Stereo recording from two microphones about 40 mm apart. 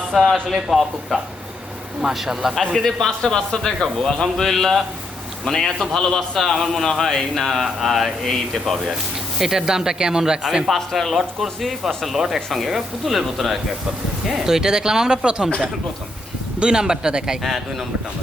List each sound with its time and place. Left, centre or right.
0.5 s speech: centre
2.0 s speech: centre
2.7 s speech: centre
3.2 s speech: centre
9.4 s speech: centre
10.8 s speech: centre; by 15.4 s right
16.6 s speech: right